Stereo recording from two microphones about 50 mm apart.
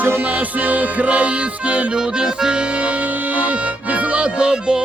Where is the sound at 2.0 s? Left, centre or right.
Centre.